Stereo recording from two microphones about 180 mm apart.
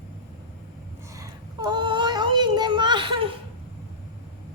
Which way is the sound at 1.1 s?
20° right (ahead or behind).